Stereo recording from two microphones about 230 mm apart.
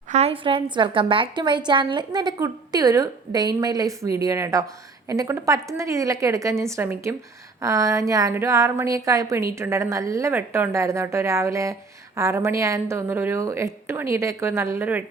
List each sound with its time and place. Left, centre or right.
0.1 s a woman's voice: right; by 15.0 s centre